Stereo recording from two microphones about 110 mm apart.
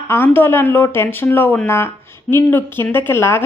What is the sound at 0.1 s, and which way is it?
A woman's voice, 20° left (ahead or behind).